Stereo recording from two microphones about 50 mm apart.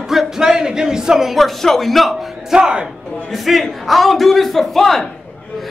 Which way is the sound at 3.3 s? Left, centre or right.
Centre.